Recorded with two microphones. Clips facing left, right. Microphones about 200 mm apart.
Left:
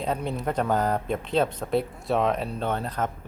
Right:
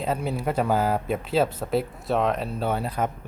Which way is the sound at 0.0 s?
5° right (ahead or behind).